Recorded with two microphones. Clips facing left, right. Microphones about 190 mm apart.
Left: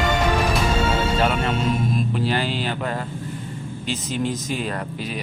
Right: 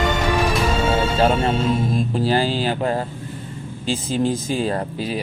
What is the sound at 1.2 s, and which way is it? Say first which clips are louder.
Music: right 6 dB; 30° right (ahead or behind).